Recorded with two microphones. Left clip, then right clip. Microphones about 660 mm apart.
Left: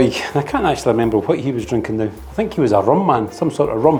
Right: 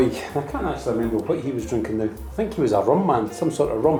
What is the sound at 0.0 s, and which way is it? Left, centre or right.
A man's voice, left.